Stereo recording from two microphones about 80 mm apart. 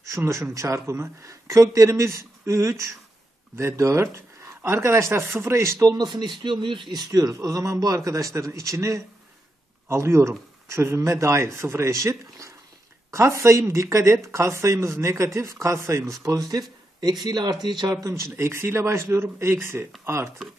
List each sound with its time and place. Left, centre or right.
0.1 s speech: right
5.9 s speech: right
7.1 s a man's voice: right
16.2 s a man's voice: right
17.0 s speech: right
18.0 s speech: right